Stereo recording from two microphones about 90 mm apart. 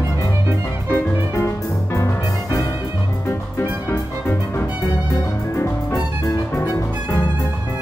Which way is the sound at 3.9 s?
30° left (ahead or behind).